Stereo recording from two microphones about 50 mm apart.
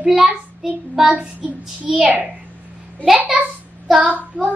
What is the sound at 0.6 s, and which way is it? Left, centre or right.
Child singing, centre.